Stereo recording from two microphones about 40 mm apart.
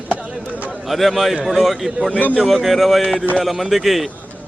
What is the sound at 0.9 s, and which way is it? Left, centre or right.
Speech, centre.